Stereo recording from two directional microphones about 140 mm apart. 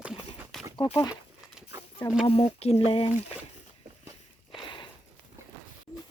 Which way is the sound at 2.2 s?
45° left (ahead or behind).